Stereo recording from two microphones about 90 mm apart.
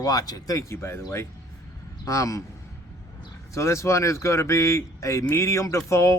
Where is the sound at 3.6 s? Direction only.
30° left (ahead or behind).